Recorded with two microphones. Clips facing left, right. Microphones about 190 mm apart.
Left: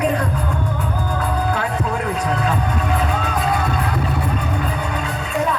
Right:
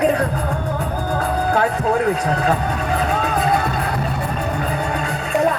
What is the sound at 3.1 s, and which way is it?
Music, 50° right (ahead or behind).